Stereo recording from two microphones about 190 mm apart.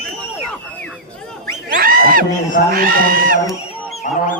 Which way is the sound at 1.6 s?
50° right (ahead or behind).